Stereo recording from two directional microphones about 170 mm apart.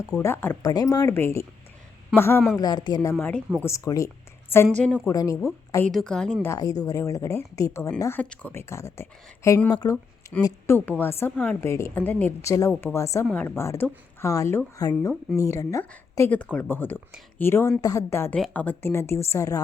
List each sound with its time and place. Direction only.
0.2 s a woman's voice: 15° left (ahead or behind)
2.6 s a woman's voice: 25° left (ahead or behind)
5.9 s a woman's voice: 5° left (ahead or behind)
6.5 s a woman's voice: 20° left (ahead or behind)